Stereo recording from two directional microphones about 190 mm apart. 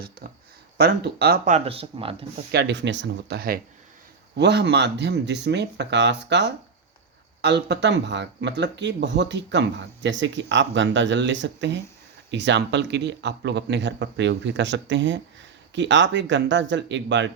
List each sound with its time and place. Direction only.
0.2 s speech: 50° right (ahead or behind)
1.5 s speech: 35° right (ahead or behind)
2.5 s speech: 65° right (ahead or behind)